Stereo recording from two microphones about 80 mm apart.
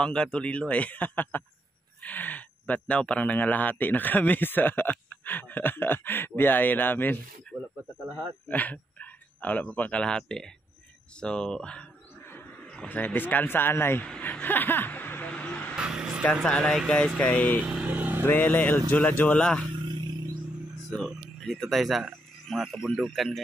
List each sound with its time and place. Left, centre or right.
0.0 s speech: centre
8.5 s speech: centre
12.8 s speech: left
15.7 s vehicle: centre
16.4 s speech: centre
17.8 s vehicle: right
18.2 s speech: left
20.9 s speech: centre